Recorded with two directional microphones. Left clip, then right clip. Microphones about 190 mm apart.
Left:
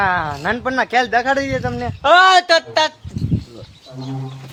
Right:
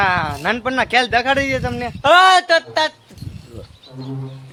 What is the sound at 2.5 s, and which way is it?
Speech, 30° left (ahead or behind).